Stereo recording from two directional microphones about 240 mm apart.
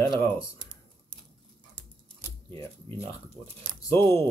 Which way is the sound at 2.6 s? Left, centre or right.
Centre.